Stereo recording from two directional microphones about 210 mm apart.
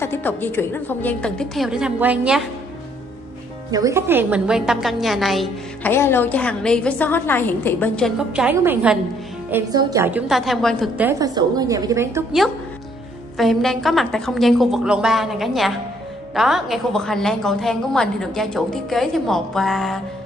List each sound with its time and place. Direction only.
0.0 s a woman's voice: 10° left (ahead or behind); by 2.4 s 5° right (ahead or behind)
3.7 s a woman's voice: 15° right (ahead or behind)
5.9 s a woman's voice: 10° left (ahead or behind)
8.3 s a woman's voice: 5° right (ahead or behind)
9.5 s a woman's voice: 15° right (ahead or behind); by 11.1 s centre (ahead or behind)
11.1 s a woman's voice: 15° right (ahead or behind)
13.4 s a woman's voice: centre (ahead or behind)